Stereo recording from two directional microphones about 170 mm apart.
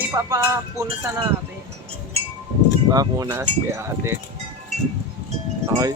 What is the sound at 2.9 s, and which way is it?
Speech, 20° right (ahead or behind).